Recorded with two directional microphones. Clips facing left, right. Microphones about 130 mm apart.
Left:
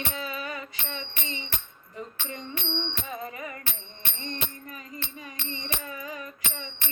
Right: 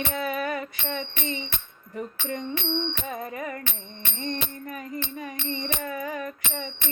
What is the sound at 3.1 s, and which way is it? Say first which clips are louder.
Music: right 4 dB; 45° right (ahead or behind).